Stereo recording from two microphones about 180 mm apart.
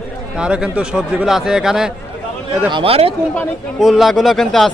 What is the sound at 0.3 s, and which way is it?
A man's voice, 5° right (ahead or behind).